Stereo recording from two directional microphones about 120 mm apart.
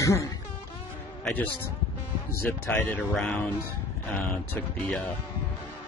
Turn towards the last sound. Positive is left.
turn(degrees=15)  # may be behind; listen again after turning